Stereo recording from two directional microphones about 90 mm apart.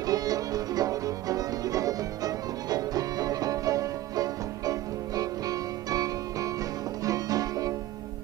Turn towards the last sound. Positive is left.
turn(degrees=-40)  # may be behind; listen again after turning